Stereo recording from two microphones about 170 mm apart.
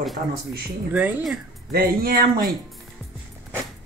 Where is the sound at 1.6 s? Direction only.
65° right (ahead or behind).